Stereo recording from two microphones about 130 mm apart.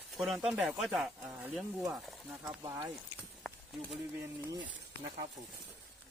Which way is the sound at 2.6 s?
30° right (ahead or behind).